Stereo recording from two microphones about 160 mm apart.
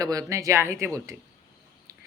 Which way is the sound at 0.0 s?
20° right (ahead or behind).